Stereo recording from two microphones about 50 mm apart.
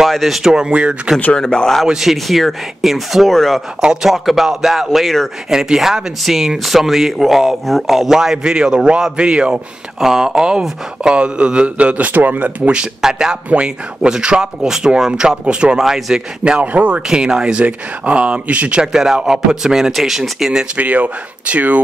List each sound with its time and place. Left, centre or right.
0.0 s speech: centre
0.5 s speech: centre
1.3 s speech: centre
1.9 s speech: centre
3.8 s speech: centre
4.1 s a man's voice: centre; by 12.8 s right
13.0 s speech: centre
16.6 s a man's voice: right
17.1 s a man's voice: centre
18.9 s speech: centre
20.7 s a man's voice: right